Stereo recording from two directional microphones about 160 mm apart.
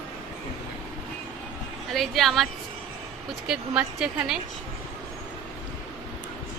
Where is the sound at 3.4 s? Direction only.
5° right (ahead or behind).